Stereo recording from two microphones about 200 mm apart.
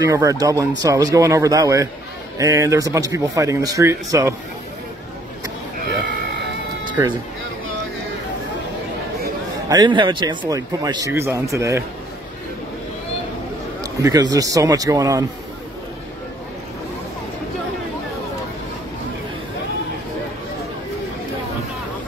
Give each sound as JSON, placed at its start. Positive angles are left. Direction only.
{"t": 0.0, "sound": "speech", "side_deg": -15}
{"t": 6.9, "sound": "music", "side_deg": -25}
{"t": 9.7, "sound": "speech", "side_deg": -20}
{"t": 14.3, "sound": "speech", "side_deg": -15}